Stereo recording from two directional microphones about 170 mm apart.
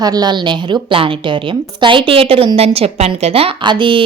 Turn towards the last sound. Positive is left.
turn(degrees=-30)  # may be behind; listen again after turning